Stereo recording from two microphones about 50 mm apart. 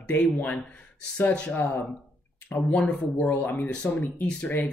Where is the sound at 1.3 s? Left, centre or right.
Left.